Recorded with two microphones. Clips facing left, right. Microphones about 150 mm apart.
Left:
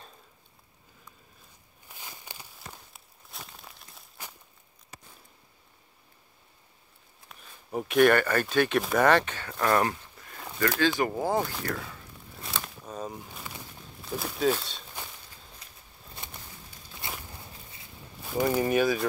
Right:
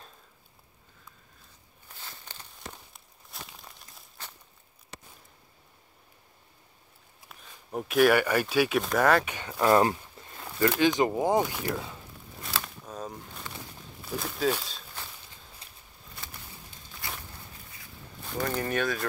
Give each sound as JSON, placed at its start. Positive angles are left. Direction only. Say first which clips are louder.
{"t": 1.9, "sound": "a sound", "louder": "left 1 dB", "side_deg": 15}
{"t": 2.9, "sound": "crumpling", "louder": "even", "side_deg": 0}
{"t": 7.2, "sound": "speech", "louder": "left 1 dB", "side_deg": 0}
{"t": 9.3, "sound": "speech", "louder": "right 3 dB", "side_deg": -15}
{"t": 12.4, "sound": "a sound", "louder": "even", "side_deg": 0}
{"t": 14.0, "sound": "speech", "louder": "left 2 dB", "side_deg": 0}
{"t": 15.6, "sound": "a sound", "louder": "right 1 dB", "side_deg": -30}
{"t": 17.0, "sound": "walk", "louder": "left 1 dB", "side_deg": 20}
{"t": 18.2, "sound": "speech", "louder": "left 5 dB", "side_deg": 10}